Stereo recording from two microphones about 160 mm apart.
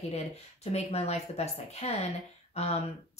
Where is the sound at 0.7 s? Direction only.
40° left (ahead or behind).